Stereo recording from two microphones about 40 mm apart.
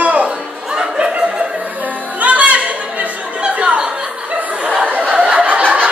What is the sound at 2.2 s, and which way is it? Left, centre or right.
Music, right.